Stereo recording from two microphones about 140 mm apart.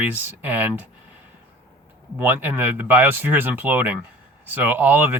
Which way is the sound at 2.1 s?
15° right (ahead or behind).